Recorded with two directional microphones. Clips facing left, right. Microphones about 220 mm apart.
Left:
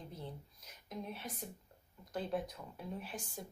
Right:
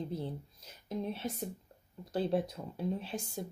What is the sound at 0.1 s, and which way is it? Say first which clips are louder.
A woman's voice: right 9 dB; 30° right (ahead or behind).